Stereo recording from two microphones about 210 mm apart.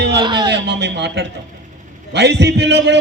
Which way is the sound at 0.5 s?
55° right (ahead or behind).